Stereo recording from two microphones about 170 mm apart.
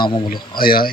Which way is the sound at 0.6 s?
60° left (ahead or behind).